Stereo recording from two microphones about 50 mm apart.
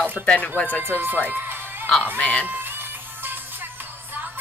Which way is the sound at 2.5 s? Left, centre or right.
Right.